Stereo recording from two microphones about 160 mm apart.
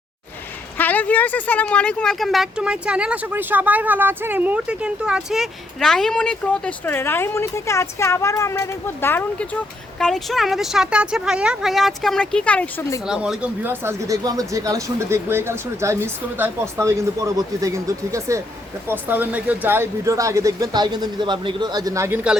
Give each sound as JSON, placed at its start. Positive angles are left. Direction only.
{"t": 0.8, "sound": "speech", "side_deg": 10}
{"t": 13.1, "sound": "speech", "side_deg": -5}